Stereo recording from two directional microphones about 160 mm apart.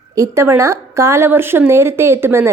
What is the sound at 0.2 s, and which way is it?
Speech, 15° right (ahead or behind).